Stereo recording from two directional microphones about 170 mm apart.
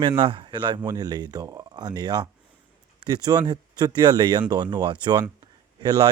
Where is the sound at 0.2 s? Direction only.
30° right (ahead or behind).